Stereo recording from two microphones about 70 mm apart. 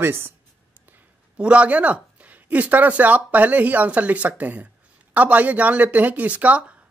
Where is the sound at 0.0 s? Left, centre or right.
Right.